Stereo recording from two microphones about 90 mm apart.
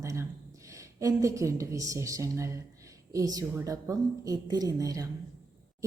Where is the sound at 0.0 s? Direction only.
35° right (ahead or behind).